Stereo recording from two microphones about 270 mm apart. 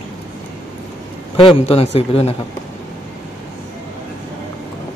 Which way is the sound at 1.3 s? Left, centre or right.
Centre.